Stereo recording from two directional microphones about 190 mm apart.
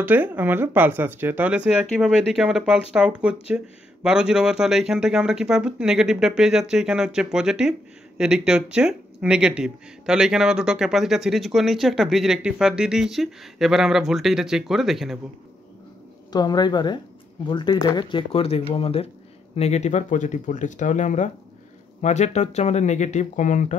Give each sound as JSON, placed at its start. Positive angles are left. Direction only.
{"t": 0.0, "sound": "speech", "side_deg": -10}
{"t": 16.3, "sound": "speech", "side_deg": 20}